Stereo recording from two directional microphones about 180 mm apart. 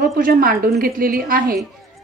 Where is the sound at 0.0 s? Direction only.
55° right (ahead or behind).